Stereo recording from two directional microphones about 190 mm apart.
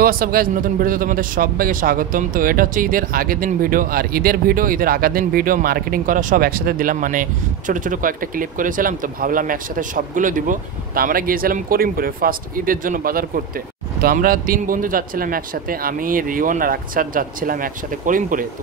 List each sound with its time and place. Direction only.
0.0 s a man's voice: 50° right (ahead or behind)